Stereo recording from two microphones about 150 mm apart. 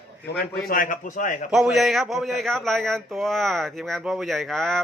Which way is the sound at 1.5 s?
5° right (ahead or behind).